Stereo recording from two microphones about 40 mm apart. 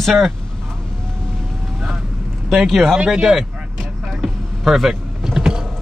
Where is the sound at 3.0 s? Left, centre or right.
Centre.